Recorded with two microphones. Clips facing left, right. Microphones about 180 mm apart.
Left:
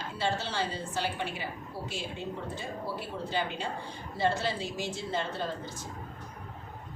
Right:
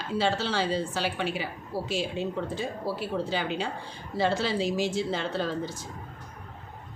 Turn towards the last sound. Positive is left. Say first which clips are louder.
# right 6 dB
turn(degrees=-90)